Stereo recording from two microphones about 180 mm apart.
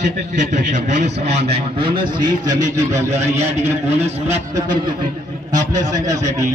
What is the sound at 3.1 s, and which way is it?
Speech, 35° right (ahead or behind).